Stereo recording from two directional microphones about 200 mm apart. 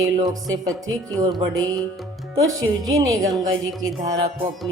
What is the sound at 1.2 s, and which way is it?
A woman's voice, 20° right (ahead or behind).